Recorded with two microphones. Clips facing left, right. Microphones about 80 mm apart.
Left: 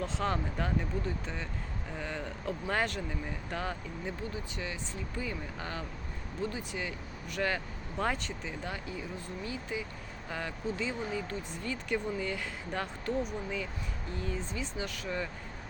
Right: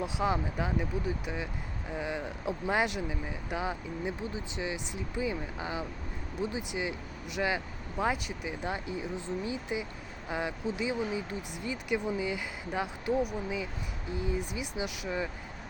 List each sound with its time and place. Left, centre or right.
0.0 s speech: centre